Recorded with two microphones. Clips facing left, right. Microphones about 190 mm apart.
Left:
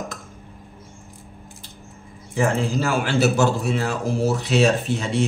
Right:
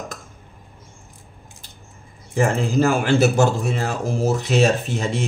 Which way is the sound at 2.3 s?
50° right (ahead or behind).